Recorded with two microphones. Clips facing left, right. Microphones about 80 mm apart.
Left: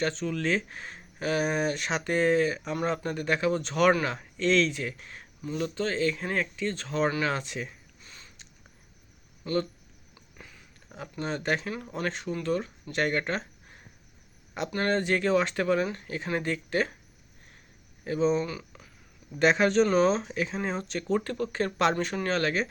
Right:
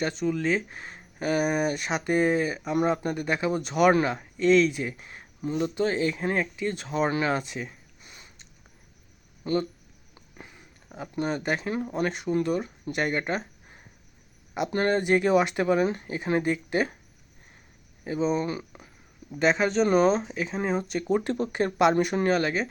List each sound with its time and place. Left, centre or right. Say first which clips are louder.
0.0 s speech: right 2 dB; centre
8.0 s sniff: right 1 dB; centre
9.4 s speech: right 2 dB; right
10.3 s a sound: right 3 dB; right
10.8 s speech: right 5 dB; centre
11.7 s speech: right 5 dB; right
14.8 s speech: right 3 dB; centre
18.0 s speech: even; centre
18.4 s speech: right 5 dB; right
19.4 s speech: left 1 dB; centre
19.8 s speech: right 2 dB; centre
21.2 s speech: right 3 dB; right
22.3 s speech: right 3 dB; centre